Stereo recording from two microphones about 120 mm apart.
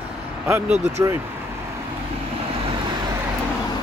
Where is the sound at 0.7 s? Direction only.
70° right (ahead or behind).